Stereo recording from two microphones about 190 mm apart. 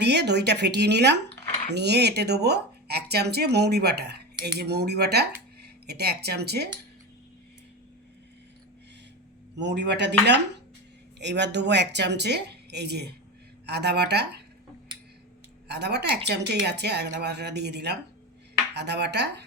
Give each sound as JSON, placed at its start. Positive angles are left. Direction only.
{"t": 0.0, "sound": "speech", "side_deg": -60}
{"t": 9.6, "sound": "speech", "side_deg": -65}
{"t": 15.6, "sound": "speech", "side_deg": -60}